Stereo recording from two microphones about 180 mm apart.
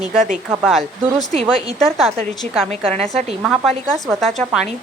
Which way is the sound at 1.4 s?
Centre (ahead or behind).